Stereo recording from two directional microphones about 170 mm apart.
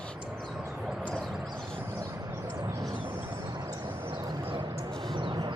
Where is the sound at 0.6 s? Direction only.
5° right (ahead or behind).